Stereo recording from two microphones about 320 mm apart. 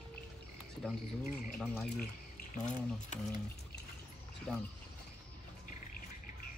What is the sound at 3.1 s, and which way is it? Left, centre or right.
Speech, left.